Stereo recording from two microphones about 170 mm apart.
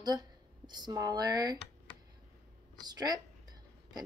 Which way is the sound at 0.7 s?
25° right (ahead or behind).